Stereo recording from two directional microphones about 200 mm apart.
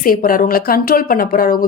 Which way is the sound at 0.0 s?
45° left (ahead or behind).